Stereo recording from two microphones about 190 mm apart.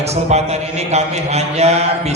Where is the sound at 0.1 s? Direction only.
35° right (ahead or behind).